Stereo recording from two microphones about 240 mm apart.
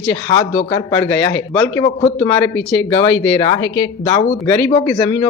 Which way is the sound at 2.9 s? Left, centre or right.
Centre.